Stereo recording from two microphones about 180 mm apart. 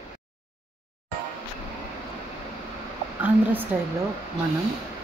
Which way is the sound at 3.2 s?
10° right (ahead or behind).